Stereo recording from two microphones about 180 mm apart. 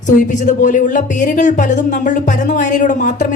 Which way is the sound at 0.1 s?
45° left (ahead or behind).